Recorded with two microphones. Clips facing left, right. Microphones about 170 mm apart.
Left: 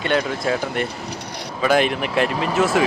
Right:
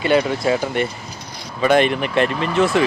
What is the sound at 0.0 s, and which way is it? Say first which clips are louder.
Speech: right 4 dB; centre (ahead or behind).